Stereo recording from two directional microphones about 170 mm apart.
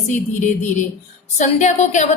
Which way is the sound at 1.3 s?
45° left (ahead or behind).